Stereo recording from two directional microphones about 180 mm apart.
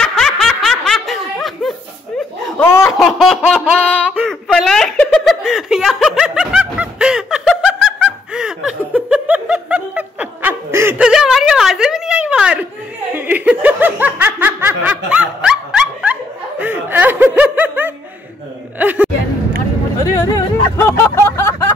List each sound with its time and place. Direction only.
0.0 s snicker: centre (ahead or behind)
2.4 s laughter: 10° left (ahead or behind)
2.9 s laughter: centre (ahead or behind)
13.1 s snicker: 10° right (ahead or behind)
18.8 s music: 10° right (ahead or behind)
20.0 s hubbub: 20° left (ahead or behind)